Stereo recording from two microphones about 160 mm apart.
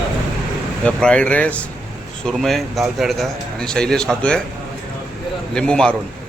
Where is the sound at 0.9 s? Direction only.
5° left (ahead or behind).